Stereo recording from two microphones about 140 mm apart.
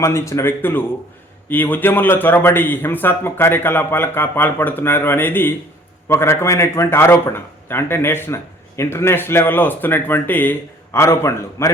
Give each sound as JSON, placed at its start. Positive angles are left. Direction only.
{"t": 0.0, "sound": "a man's voice", "side_deg": 20}